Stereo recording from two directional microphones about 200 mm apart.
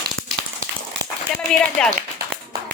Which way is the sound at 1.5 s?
5° left (ahead or behind).